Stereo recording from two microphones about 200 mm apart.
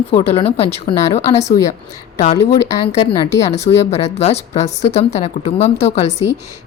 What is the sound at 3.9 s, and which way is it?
A woman's voice, 30° left (ahead or behind).